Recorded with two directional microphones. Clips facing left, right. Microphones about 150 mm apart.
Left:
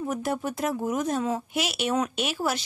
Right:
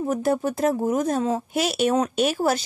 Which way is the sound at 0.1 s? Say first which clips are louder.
Right 8 dB; 40° right (ahead or behind).